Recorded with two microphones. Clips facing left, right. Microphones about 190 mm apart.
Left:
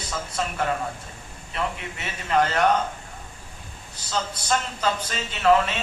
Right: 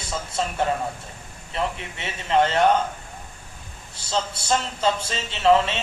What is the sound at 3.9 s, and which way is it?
A man's voice, 30° right (ahead or behind).